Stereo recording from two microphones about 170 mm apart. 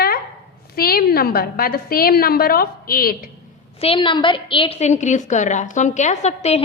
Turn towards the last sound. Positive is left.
turn(degrees=40)  # may be behind; listen again after turning